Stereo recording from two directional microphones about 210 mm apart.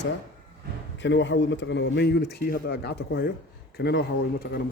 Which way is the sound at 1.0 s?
60° left (ahead or behind).